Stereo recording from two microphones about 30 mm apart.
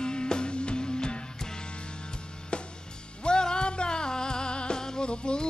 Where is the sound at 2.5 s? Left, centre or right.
Left.